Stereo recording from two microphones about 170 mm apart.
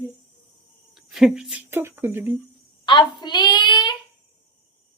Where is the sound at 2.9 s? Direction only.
25° left (ahead or behind).